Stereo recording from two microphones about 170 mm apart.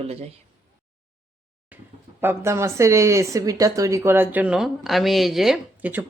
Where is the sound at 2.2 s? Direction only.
15° right (ahead or behind).